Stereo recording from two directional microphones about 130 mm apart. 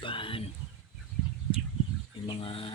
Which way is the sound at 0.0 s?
40° left (ahead or behind).